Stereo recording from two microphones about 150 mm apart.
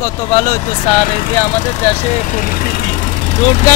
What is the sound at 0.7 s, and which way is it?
Speech, 45° left (ahead or behind).